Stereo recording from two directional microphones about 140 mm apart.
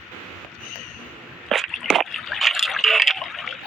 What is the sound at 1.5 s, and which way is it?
Water, centre (ahead or behind).